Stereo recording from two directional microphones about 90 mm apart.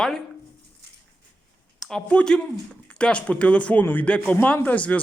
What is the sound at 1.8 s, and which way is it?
Speech, 5° left (ahead or behind).